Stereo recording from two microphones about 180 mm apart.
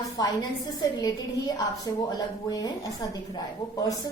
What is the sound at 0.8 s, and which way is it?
A woman's voice, 20° left (ahead or behind).